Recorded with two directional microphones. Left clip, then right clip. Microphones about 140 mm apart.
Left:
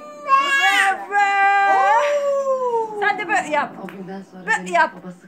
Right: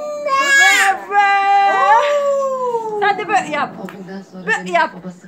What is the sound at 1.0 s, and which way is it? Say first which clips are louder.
Cat: right 3 dB; 20° left (ahead or behind).